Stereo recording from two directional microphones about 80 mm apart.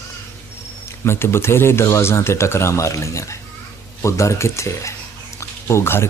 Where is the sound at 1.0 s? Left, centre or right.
Left.